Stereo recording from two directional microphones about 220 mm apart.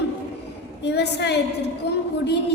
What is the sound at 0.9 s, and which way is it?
Speech, 50° left (ahead or behind).